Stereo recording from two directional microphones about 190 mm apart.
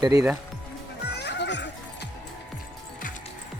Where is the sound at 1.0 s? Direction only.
60° left (ahead or behind).